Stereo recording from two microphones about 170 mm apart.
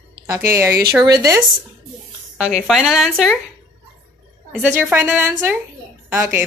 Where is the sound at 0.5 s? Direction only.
15° right (ahead or behind).